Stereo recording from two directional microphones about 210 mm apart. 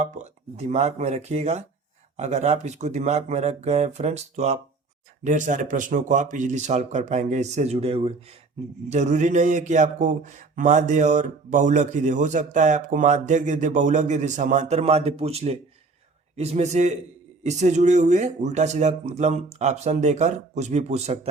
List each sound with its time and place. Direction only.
0.0 s speech: 30° right (ahead or behind)